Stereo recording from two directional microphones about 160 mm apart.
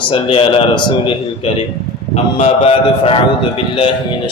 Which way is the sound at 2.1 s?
35° left (ahead or behind).